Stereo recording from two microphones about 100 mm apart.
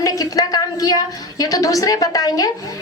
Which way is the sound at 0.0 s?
40° left (ahead or behind).